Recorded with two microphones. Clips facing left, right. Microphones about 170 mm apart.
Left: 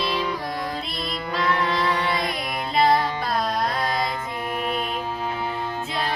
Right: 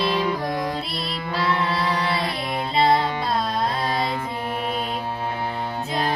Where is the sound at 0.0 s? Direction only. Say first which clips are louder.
Right 3 dB; 50° right (ahead or behind).